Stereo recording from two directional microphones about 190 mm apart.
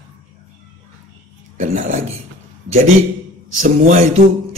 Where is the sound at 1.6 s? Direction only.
40° right (ahead or behind).